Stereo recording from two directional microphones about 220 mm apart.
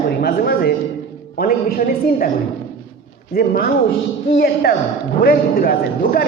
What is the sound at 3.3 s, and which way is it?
A man's voice, 45° left (ahead or behind).